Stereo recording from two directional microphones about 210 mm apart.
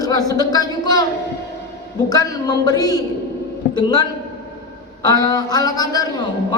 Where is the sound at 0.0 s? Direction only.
15° left (ahead or behind).